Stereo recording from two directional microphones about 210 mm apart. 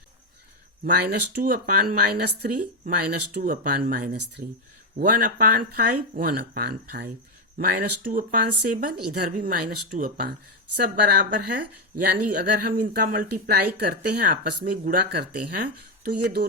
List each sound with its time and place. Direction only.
0.9 s speech: 50° right (ahead or behind)